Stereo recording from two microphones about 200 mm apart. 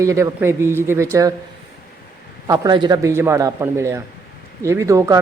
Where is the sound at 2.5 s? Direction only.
20° right (ahead or behind).